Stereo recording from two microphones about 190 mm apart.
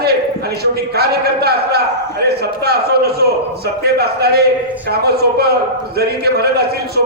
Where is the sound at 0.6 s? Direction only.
55° right (ahead or behind).